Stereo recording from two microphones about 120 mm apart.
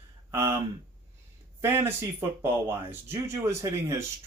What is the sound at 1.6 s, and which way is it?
Speech, 20° right (ahead or behind).